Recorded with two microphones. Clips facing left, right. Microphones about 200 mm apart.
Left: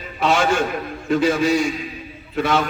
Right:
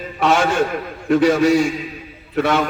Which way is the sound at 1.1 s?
70° right (ahead or behind).